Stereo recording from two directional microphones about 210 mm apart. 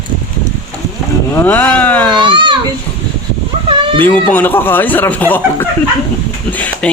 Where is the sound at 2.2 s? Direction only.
20° right (ahead or behind).